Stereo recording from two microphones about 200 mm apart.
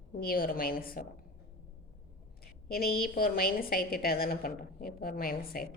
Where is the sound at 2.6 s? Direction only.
50° left (ahead or behind).